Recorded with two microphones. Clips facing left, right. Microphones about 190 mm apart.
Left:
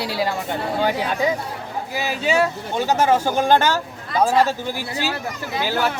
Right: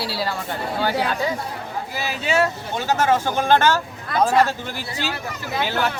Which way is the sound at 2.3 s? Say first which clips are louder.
Even; 15° left (ahead or behind).